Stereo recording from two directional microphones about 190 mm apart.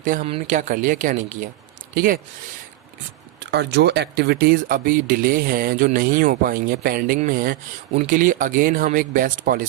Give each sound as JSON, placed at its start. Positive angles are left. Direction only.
{"t": 0.0, "sound": "speech", "side_deg": -45}
{"t": 3.4, "sound": "speech", "side_deg": -60}